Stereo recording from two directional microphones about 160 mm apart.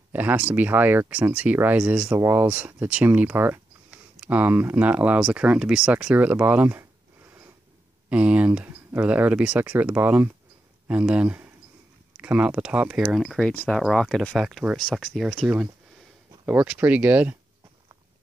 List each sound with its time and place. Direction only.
0.1 s speech: 10° right (ahead or behind)